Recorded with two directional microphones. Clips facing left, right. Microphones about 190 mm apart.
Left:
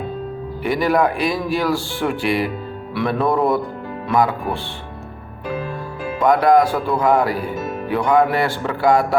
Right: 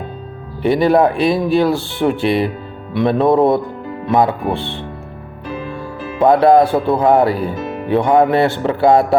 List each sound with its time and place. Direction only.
0.6 s speech: 25° right (ahead or behind)
6.1 s speech: 30° right (ahead or behind)